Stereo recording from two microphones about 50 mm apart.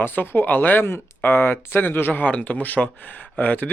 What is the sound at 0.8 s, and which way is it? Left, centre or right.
Speech, left.